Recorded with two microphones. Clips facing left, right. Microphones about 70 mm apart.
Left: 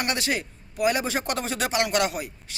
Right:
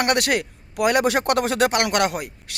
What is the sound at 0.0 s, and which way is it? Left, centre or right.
A man's voice, right.